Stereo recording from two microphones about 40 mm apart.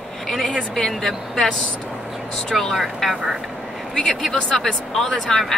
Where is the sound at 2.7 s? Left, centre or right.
Centre.